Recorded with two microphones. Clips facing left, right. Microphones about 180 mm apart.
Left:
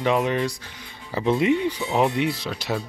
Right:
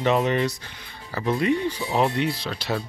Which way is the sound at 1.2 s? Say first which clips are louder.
Left 2 dB; 15° left (ahead or behind).